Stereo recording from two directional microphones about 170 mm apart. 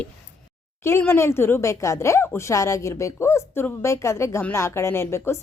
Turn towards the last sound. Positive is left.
turn(degrees=15)  # may be behind; listen again after turning